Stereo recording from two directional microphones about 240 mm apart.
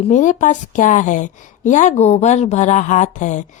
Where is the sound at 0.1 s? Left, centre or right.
Left.